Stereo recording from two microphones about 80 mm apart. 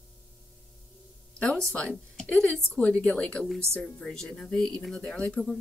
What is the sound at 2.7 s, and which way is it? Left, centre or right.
Speech, centre.